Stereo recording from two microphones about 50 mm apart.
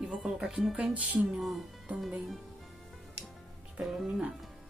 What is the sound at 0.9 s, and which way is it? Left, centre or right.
Music, right.